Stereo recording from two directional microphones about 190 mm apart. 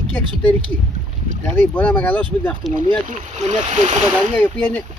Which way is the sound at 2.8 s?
40° right (ahead or behind).